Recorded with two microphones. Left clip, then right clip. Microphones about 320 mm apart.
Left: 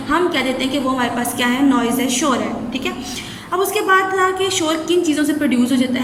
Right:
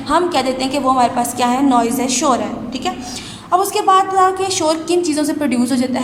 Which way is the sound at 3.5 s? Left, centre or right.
Centre.